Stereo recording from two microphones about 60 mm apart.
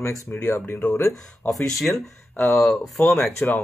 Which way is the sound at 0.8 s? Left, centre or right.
Left.